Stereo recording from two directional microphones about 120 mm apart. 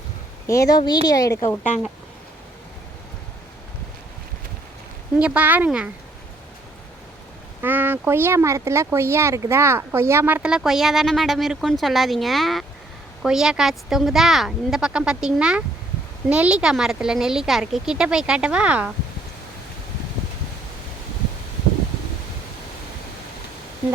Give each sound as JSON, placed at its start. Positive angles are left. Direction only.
{"t": 0.4, "sound": "a woman's voice", "side_deg": 25}
{"t": 5.2, "sound": "speech", "side_deg": -10}
{"t": 7.6, "sound": "speech", "side_deg": -15}